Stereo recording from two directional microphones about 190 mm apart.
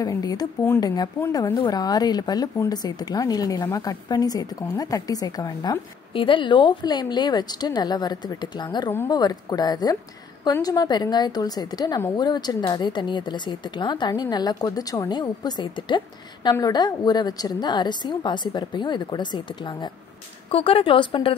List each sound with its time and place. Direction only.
0.0 s speech: 20° left (ahead or behind)